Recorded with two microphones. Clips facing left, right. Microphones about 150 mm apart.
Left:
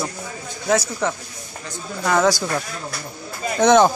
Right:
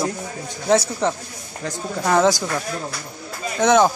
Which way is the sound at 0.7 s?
30° right (ahead or behind).